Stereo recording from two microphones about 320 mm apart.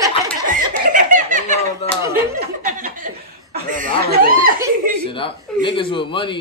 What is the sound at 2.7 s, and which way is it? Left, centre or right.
Chuckle, right.